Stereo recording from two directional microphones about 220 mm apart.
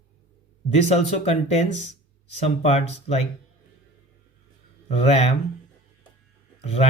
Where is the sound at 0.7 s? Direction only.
30° left (ahead or behind).